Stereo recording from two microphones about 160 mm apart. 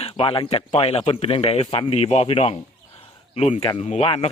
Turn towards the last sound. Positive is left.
turn(degrees=35)  # may be behind; listen again after turning